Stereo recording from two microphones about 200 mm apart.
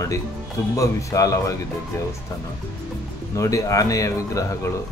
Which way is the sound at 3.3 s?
15° left (ahead or behind).